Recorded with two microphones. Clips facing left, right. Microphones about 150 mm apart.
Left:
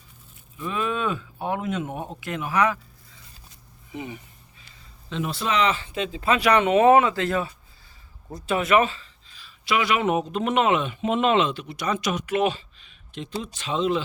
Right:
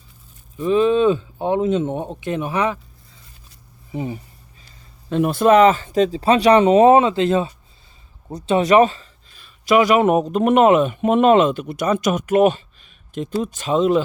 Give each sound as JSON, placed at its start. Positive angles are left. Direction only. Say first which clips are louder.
{"t": 0.5, "sound": "speech", "louder": "right 12 dB", "side_deg": -35}
{"t": 3.9, "sound": "speech", "louder": "right 8 dB", "side_deg": -35}
{"t": 5.0, "sound": "speech", "louder": "right 12 dB", "side_deg": -50}